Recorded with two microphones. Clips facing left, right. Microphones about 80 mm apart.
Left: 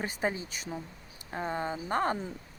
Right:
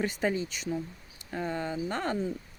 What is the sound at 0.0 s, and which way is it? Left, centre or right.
Speech, left.